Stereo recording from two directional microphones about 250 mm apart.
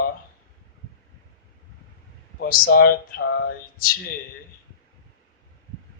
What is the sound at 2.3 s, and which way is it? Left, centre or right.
Speech, left.